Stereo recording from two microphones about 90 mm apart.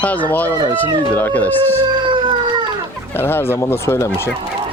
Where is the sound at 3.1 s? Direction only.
25° left (ahead or behind).